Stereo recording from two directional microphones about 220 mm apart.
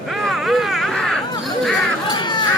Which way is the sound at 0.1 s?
Centre (ahead or behind).